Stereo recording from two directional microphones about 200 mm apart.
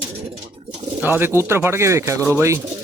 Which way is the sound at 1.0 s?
10° right (ahead or behind).